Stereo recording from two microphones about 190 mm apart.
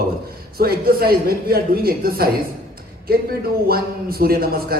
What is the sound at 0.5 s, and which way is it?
A man's voice, 55° right (ahead or behind).